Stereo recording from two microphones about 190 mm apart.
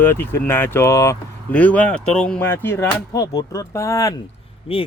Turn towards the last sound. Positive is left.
turn(degrees=30)  # may be behind; listen again after turning